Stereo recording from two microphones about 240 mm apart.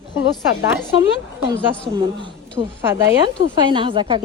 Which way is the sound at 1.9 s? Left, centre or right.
Centre.